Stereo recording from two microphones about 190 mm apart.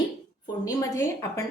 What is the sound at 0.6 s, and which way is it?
Speech, 15° left (ahead or behind).